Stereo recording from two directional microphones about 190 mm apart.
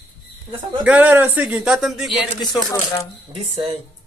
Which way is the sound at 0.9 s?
10° right (ahead or behind).